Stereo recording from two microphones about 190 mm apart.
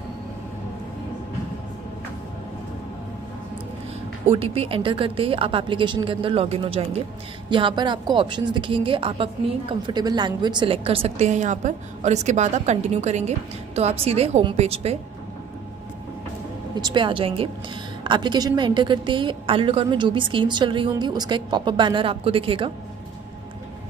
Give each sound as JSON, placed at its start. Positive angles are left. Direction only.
{"t": 4.3, "sound": "a woman's voice", "side_deg": -30}
{"t": 16.7, "sound": "speech", "side_deg": -25}